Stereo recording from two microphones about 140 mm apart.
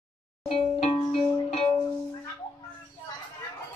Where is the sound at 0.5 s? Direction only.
45° left (ahead or behind).